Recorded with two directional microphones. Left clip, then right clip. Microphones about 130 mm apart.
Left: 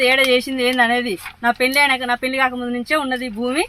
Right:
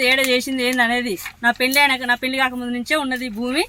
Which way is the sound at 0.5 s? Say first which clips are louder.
Left 2 dB; 30° right (ahead or behind).